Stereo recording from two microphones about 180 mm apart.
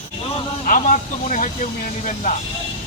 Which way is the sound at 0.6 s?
45° left (ahead or behind).